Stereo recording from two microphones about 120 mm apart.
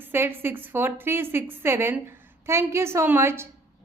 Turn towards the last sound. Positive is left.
turn(degrees=-20)  # may be behind; listen again after turning